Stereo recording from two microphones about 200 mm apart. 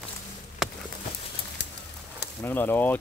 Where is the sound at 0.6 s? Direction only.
Centre (ahead or behind).